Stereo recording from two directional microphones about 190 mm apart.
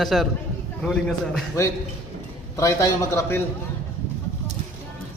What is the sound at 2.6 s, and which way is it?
Speech, 15° left (ahead or behind).